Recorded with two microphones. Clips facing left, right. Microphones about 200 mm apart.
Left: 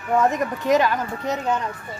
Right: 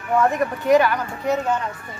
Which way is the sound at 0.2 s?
20° left (ahead or behind).